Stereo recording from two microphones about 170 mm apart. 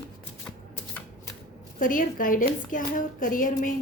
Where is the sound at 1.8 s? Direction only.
55° left (ahead or behind).